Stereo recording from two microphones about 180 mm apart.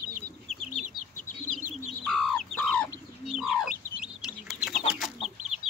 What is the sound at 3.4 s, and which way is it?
Chicken, 5° right (ahead or behind).